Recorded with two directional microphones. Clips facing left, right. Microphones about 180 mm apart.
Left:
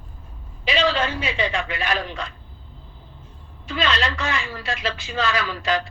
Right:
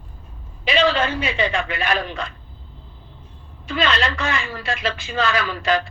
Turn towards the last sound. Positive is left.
turn(degrees=-55)  # may be behind; listen again after turning